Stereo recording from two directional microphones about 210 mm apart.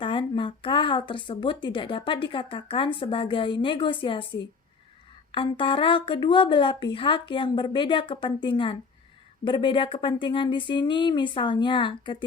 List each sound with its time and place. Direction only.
0.0 s speech: 25° left (ahead or behind)
5.3 s speech: 25° left (ahead or behind)